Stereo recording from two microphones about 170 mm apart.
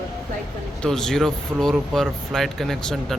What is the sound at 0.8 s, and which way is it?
Speech, centre (ahead or behind).